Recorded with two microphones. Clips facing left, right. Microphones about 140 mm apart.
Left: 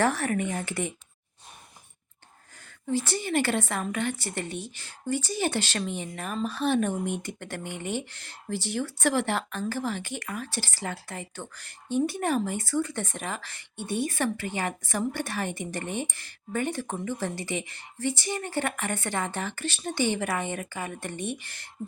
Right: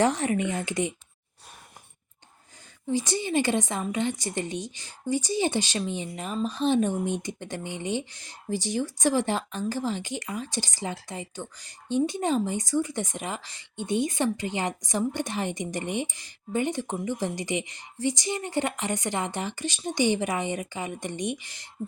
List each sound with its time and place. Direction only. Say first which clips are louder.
0.0 s speech: right 2 dB; 20° right (ahead or behind)
2.9 s speech: right 1 dB; 15° right (ahead or behind)